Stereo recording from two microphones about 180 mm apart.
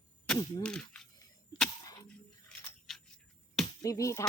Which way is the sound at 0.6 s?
5° left (ahead or behind).